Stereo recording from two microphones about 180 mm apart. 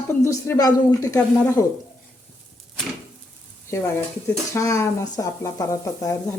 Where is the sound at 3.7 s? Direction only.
15° left (ahead or behind).